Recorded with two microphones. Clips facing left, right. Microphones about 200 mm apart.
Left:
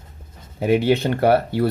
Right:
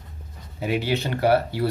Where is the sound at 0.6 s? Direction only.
50° left (ahead or behind).